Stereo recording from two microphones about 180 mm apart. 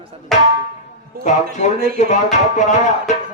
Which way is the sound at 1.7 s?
55° right (ahead or behind).